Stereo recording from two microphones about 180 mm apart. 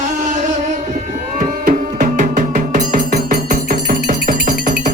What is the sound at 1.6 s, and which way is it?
Music, 45° right (ahead or behind).